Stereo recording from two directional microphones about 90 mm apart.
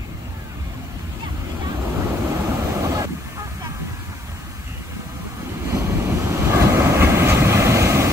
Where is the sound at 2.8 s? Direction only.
35° right (ahead or behind).